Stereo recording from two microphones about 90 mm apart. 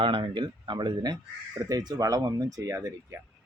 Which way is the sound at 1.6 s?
45° right (ahead or behind).